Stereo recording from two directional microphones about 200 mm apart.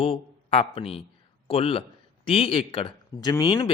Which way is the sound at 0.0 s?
30° left (ahead or behind).